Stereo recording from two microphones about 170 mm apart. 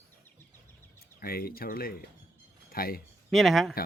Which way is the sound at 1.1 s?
60° left (ahead or behind).